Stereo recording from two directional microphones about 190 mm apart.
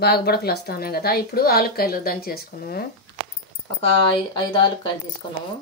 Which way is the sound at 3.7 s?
30° left (ahead or behind).